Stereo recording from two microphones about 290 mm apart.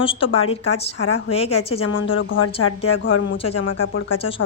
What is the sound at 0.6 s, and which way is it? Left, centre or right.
A woman's voice, left.